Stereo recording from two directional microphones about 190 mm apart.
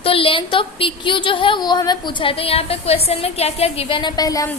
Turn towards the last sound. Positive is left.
turn(degrees=20)  # may be behind; listen again after turning